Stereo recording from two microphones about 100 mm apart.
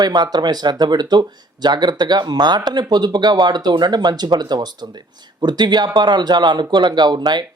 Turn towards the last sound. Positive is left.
turn(degrees=-50)  # may be behind; listen again after turning